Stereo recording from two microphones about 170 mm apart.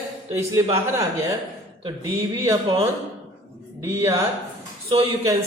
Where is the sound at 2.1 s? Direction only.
15° right (ahead or behind).